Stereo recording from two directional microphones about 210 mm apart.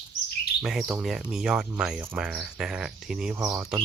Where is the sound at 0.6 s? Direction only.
Centre (ahead or behind).